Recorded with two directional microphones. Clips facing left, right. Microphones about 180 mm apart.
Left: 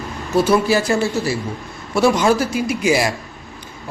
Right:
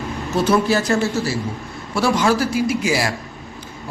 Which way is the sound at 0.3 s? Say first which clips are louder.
Left 2 dB; 10° left (ahead or behind).